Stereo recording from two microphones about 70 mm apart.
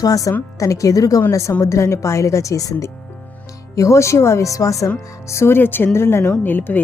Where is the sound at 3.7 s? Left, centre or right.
Left.